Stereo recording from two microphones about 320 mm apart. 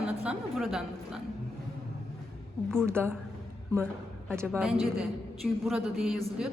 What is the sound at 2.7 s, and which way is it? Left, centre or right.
Speech, centre.